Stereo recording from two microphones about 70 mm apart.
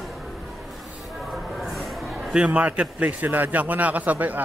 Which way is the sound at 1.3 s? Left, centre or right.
Centre.